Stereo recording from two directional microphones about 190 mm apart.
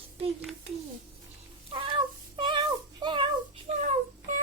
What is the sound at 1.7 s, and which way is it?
Child singing, 25° right (ahead or behind).